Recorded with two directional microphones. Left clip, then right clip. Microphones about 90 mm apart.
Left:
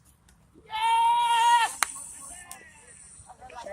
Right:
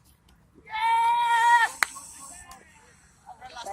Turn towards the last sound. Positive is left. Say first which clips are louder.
# right 2 dB
turn(degrees=5)  # may be behind; listen again after turning